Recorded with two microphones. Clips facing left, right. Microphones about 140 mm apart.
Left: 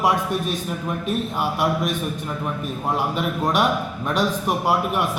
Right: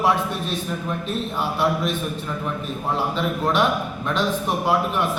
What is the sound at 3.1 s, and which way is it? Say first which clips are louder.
A man's voice: right 2 dB; 10° left (ahead or behind).